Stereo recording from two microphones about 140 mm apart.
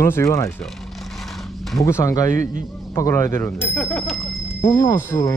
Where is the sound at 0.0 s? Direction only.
20° left (ahead or behind).